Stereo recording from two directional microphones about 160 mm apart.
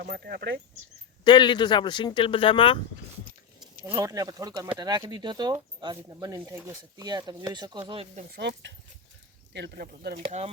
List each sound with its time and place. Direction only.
0.0 s speech: 75° right (ahead or behind)
1.2 s speech: 30° left (ahead or behind)
3.8 s speech: 20° right (ahead or behind); by 8.2 s 35° right (ahead or behind)
8.4 s speech: 90° right
10.2 s speech: 40° right (ahead or behind)